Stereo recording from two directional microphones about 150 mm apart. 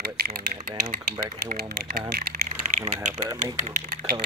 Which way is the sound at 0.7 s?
65° right (ahead or behind).